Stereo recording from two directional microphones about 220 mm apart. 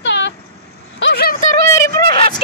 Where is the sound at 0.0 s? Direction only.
55° left (ahead or behind).